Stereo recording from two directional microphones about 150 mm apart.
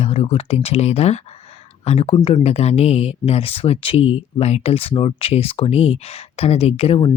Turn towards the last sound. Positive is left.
turn(degrees=40)  # may be behind; listen again after turning